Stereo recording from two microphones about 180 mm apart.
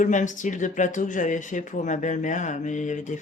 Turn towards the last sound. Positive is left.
turn(degrees=45)  # may be behind; listen again after turning